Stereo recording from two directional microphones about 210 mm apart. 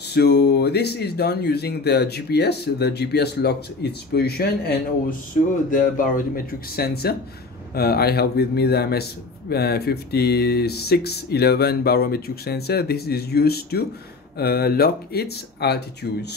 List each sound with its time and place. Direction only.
0.1 s speech: 50° left (ahead or behind)